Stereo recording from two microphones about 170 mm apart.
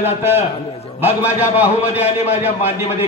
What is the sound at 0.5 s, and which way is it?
Speech, 35° left (ahead or behind).